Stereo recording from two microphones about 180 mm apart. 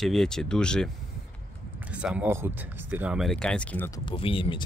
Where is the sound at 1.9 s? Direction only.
5° right (ahead or behind); by 3.9 s 10° left (ahead or behind).